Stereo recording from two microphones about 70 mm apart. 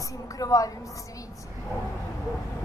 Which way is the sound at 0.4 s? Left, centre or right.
Left.